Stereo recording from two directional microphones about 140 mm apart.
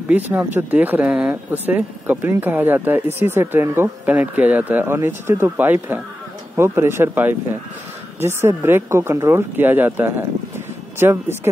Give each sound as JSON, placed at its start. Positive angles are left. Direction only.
{"t": 0.1, "sound": "speech", "side_deg": -10}